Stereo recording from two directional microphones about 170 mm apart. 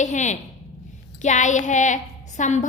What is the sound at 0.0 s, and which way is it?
A woman's voice, 45° left (ahead or behind).